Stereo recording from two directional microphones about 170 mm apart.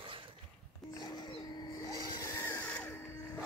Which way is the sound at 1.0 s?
25° left (ahead or behind).